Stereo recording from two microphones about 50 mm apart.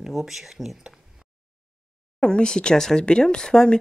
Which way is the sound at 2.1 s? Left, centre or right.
Centre.